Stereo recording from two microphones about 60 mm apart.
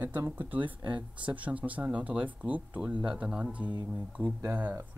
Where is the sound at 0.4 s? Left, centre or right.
Right.